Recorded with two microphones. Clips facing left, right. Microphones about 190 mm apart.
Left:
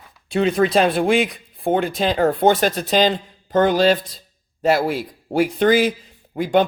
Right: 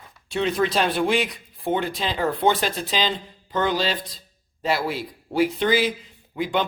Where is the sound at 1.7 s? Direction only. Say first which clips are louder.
Left 6 dB; 50° left (ahead or behind).